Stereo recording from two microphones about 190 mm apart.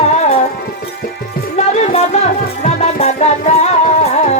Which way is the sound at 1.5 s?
35° left (ahead or behind).